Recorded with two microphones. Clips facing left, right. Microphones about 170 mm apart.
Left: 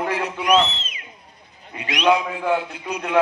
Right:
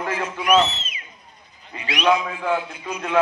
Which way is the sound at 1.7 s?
15° left (ahead or behind).